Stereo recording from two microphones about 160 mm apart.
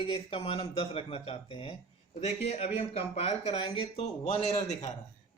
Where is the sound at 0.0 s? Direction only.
35° left (ahead or behind).